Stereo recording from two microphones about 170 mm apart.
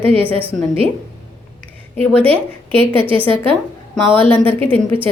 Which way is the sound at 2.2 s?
35° right (ahead or behind).